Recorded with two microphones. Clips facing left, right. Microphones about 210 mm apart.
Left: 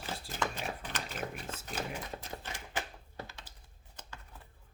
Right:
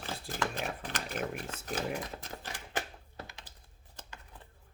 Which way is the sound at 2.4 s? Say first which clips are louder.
Right 2 dB; 35° right (ahead or behind).